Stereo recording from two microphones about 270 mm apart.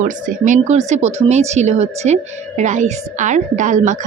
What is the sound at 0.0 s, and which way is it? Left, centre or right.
Speech, right.